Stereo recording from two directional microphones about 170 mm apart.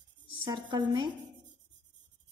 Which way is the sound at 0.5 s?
25° right (ahead or behind).